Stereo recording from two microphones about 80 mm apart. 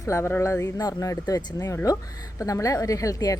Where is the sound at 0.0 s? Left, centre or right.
Left.